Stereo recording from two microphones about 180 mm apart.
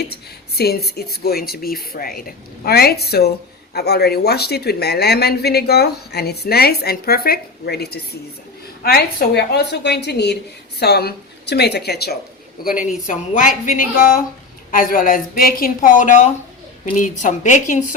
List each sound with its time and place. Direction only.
0.1 s a woman's voice: 60° left (ahead or behind)
12.6 s a woman's voice: 50° left (ahead or behind)